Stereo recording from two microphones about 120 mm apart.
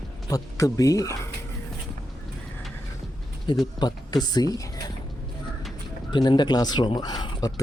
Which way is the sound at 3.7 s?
35° left (ahead or behind).